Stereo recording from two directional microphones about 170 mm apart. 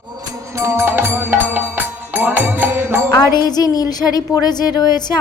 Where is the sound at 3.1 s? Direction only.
25° left (ahead or behind).